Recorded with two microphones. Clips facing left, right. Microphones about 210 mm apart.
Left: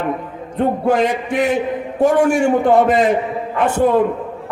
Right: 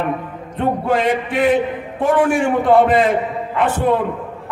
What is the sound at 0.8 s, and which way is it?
A man's voice, 45° left (ahead or behind).